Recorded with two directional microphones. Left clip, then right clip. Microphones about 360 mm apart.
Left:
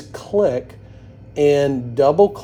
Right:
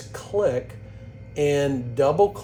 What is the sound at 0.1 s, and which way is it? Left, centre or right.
Music, left.